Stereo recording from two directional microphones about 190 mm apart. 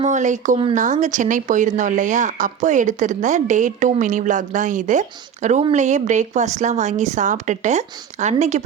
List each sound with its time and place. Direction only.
0.0 s speech: 40° right (ahead or behind)